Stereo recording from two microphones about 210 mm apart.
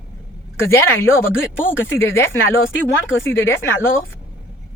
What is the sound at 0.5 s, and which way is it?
A woman's voice, 10° left (ahead or behind).